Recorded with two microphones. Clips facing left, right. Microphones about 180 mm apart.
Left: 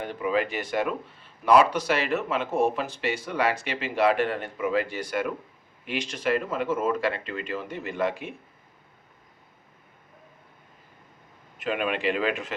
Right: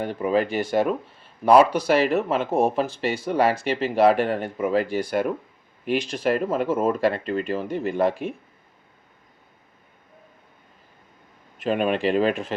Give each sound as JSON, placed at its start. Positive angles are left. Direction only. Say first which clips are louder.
{"t": 0.0, "sound": "speech", "louder": "right 4 dB", "side_deg": -35}
{"t": 11.6, "sound": "speech", "louder": "right 5 dB", "side_deg": -35}